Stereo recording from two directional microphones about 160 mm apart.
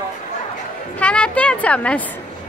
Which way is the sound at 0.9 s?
10° left (ahead or behind).